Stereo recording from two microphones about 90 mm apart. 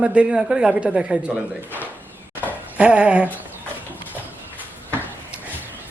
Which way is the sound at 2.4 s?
15° right (ahead or behind).